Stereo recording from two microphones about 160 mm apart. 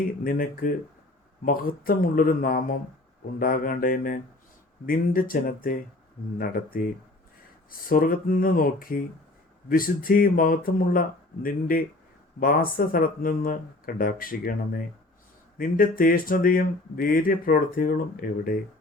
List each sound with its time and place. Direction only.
0.0 s speech: 65° left (ahead or behind)